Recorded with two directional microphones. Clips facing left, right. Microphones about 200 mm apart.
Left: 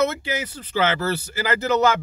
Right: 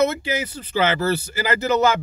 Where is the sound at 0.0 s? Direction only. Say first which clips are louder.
Right 2 dB; 10° right (ahead or behind).